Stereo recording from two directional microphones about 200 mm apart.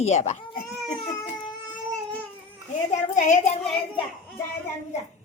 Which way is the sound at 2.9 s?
35° left (ahead or behind).